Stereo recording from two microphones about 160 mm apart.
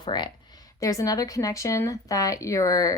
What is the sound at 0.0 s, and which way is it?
A woman's voice, 25° left (ahead or behind).